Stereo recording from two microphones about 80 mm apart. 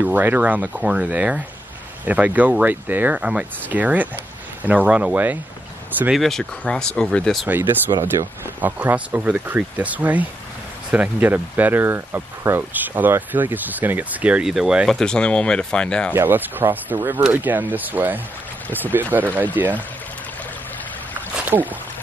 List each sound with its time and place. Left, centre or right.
0.0 s speech: right
6.1 s speech: centre
7.4 s speech: right
8.1 s speech: right
8.5 s speech: right
14.4 s speech: centre
14.9 s speech: centre
16.1 s speech: right